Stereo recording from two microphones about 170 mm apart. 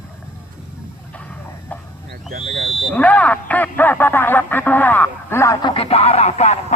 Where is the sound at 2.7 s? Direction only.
10° left (ahead or behind).